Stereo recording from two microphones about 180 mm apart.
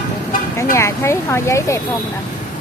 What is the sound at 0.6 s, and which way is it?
Speech, 15° left (ahead or behind).